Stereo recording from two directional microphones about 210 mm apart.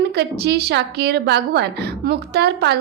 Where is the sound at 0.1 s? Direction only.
50° right (ahead or behind).